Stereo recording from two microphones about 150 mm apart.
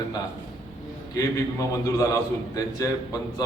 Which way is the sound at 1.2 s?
20° left (ahead or behind).